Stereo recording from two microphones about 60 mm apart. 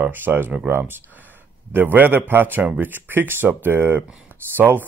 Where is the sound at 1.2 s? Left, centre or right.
Right.